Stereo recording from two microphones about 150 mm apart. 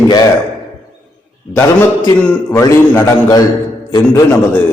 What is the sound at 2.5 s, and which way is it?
A man's voice, 20° left (ahead or behind).